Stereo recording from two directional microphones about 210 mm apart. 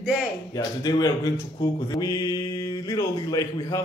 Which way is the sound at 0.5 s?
20° left (ahead or behind).